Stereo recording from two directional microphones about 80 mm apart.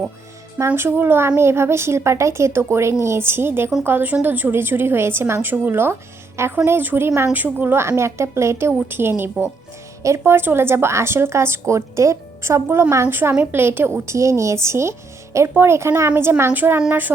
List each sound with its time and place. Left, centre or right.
0.8 s a woman's voice: right